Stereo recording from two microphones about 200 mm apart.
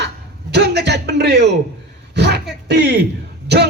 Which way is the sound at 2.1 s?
55° right (ahead or behind).